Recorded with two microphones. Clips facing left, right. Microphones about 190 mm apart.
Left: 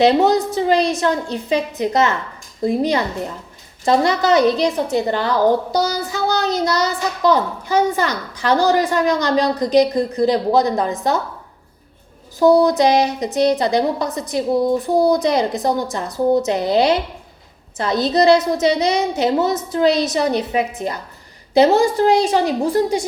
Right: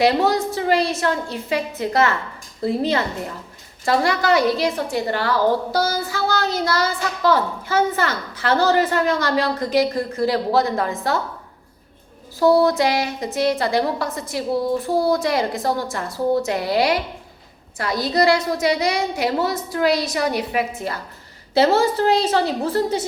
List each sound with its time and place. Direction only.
0.0 s a woman's voice: 20° left (ahead or behind)
12.4 s a woman's voice: 20° left (ahead or behind)